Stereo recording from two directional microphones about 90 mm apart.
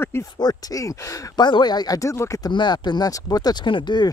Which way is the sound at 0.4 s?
45° left (ahead or behind).